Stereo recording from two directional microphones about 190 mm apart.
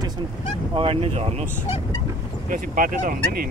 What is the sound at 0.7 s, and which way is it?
Speech, 30° right (ahead or behind).